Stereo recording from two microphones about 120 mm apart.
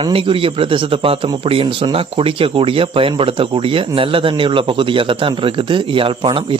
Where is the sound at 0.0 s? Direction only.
45° right (ahead or behind).